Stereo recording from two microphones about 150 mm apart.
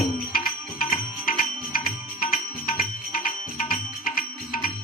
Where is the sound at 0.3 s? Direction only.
80° left.